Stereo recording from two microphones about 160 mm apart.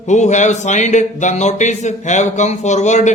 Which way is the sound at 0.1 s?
50° left (ahead or behind).